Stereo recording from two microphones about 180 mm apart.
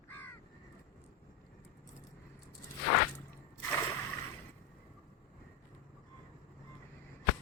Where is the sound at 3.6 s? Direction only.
10° left (ahead or behind).